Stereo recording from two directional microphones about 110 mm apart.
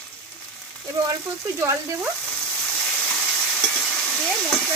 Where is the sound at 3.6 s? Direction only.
15° left (ahead or behind).